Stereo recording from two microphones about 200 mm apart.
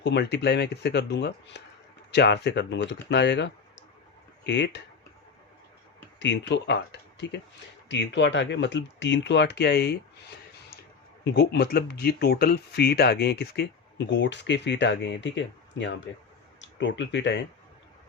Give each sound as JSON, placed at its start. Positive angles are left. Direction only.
{"t": 0.0, "sound": "speech", "side_deg": 60}
{"t": 6.1, "sound": "speech", "side_deg": 65}